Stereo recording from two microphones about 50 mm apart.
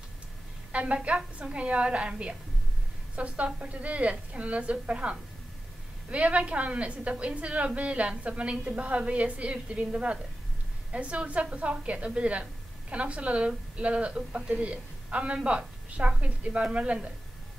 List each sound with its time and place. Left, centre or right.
0.7 s a woman's voice: right
3.4 s a woman's voice: right